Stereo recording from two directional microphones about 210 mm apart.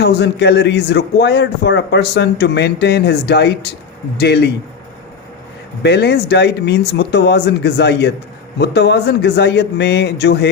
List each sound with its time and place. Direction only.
0.0 s a man's voice: 55° left (ahead or behind)
5.8 s a man's voice: 55° left (ahead or behind)